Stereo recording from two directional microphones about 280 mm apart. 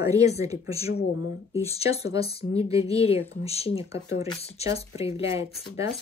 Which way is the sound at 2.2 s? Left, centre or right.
Left.